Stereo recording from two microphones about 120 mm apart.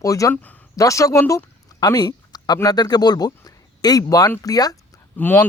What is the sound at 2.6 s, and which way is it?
Speech, 35° left (ahead or behind).